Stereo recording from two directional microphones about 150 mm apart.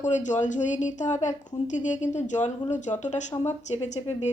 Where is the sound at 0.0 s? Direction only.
55° left (ahead or behind).